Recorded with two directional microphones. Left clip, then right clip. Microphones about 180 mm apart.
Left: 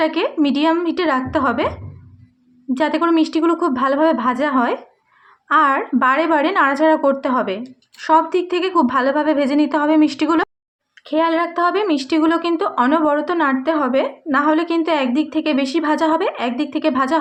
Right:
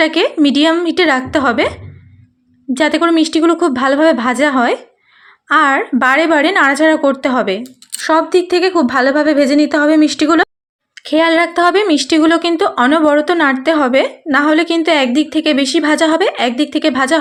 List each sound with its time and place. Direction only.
0.0 s a woman's voice: 30° right (ahead or behind)
10.9 s speech: 35° right (ahead or behind)